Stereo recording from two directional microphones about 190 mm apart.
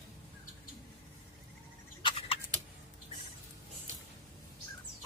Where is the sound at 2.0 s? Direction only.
30° left (ahead or behind).